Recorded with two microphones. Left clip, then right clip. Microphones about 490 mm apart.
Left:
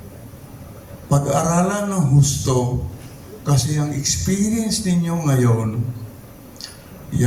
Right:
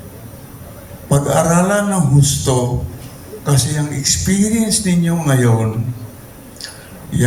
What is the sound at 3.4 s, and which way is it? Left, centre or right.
A man's voice, left.